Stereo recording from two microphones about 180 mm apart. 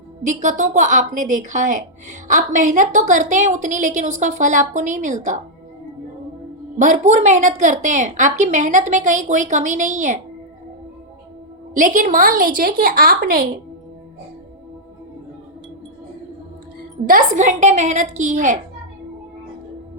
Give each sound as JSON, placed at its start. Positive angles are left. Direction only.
{"t": 0.3, "sound": "speech", "side_deg": -40}
{"t": 6.7, "sound": "speech", "side_deg": -40}
{"t": 11.7, "sound": "speech", "side_deg": -45}
{"t": 17.1, "sound": "a woman's voice", "side_deg": -45}